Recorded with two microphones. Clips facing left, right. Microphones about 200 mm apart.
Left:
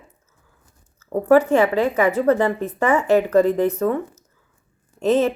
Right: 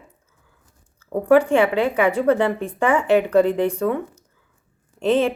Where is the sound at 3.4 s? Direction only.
40° left (ahead or behind).